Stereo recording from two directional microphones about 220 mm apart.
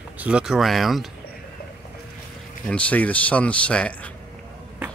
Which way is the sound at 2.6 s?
5° left (ahead or behind).